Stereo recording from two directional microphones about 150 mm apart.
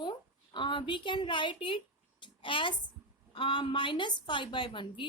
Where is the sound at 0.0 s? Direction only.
30° left (ahead or behind).